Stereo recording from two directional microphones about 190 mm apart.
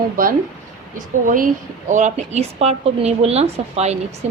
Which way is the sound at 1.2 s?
45° right (ahead or behind).